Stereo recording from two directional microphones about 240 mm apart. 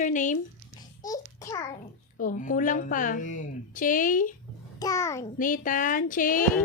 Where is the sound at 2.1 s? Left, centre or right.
Left.